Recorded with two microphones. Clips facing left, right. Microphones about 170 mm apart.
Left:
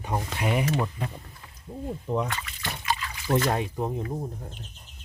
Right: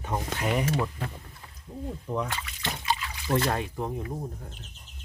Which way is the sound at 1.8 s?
20° left (ahead or behind).